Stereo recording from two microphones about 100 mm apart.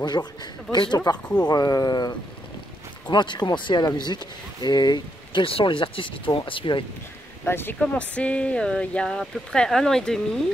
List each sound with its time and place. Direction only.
0.0 s speech: 45° left (ahead or behind)
5.4 s speech: 65° left (ahead or behind)
7.4 s speech: 25° left (ahead or behind)
8.1 s speech: 10° left (ahead or behind)